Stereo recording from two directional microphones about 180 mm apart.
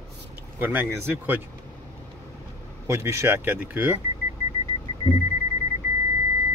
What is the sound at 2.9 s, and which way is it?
Speech, 15° right (ahead or behind).